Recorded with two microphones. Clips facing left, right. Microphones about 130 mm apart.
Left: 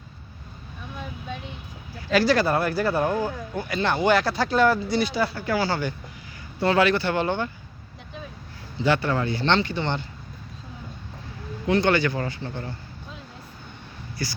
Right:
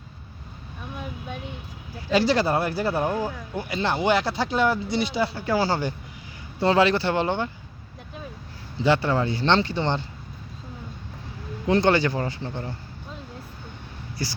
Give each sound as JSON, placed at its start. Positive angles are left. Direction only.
{"t": 2.1, "sound": "speech", "side_deg": -25}
{"t": 3.0, "sound": "speech", "side_deg": 0}
{"t": 3.7, "sound": "speech", "side_deg": -30}
{"t": 8.8, "sound": "speech", "side_deg": -25}
{"t": 11.7, "sound": "speech", "side_deg": -35}
{"t": 12.1, "sound": "speech", "side_deg": -20}